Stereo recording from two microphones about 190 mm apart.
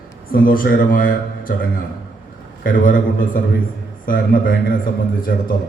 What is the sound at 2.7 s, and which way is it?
A man's voice, 45° left (ahead or behind).